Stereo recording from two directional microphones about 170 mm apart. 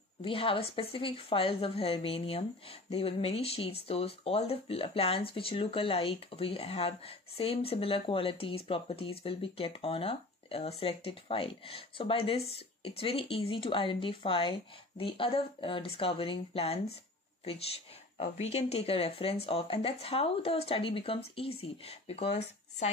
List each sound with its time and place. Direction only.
0.2 s speech: 30° left (ahead or behind)
18.1 s speech: 45° left (ahead or behind)